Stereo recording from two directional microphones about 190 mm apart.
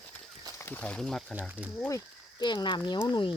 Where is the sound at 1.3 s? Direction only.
10° right (ahead or behind).